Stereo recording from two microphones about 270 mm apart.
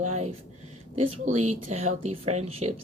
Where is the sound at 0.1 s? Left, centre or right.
Right.